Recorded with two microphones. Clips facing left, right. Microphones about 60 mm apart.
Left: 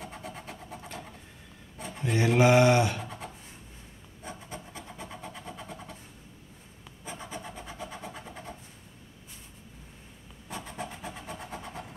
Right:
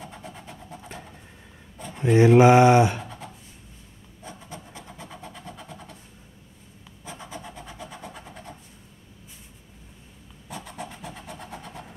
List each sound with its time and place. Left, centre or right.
0.0 s vehicle: centre
2.0 s speech: right
3.0 s writing: centre
4.8 s vehicle: centre
7.7 s vehicle: centre
11.1 s vehicle: centre